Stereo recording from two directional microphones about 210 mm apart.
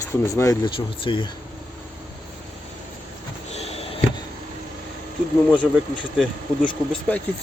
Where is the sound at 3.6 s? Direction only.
30° left (ahead or behind).